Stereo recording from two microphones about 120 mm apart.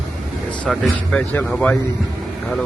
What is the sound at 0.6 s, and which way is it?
A man's voice, 5° left (ahead or behind).